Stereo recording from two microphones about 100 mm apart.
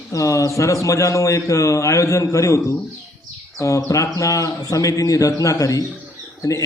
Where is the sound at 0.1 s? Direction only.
35° left (ahead or behind).